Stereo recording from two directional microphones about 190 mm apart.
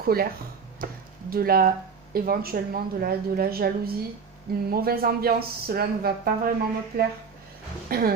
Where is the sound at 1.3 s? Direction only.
50° right (ahead or behind).